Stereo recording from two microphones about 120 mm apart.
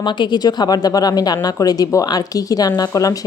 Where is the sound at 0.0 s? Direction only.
40° left (ahead or behind).